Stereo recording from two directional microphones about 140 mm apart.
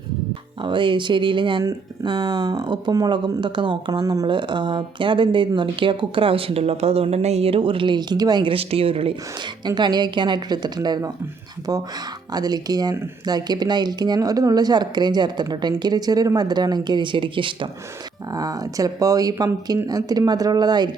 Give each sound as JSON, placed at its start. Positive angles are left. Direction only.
{"t": 0.6, "sound": "speech", "side_deg": -35}
{"t": 9.6, "sound": "speech", "side_deg": -30}
{"t": 18.3, "sound": "speech", "side_deg": -25}